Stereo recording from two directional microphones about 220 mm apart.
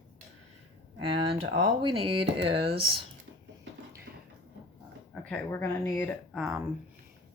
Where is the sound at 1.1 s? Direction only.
25° right (ahead or behind).